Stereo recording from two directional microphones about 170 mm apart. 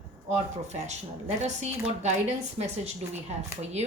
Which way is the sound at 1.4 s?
40° right (ahead or behind).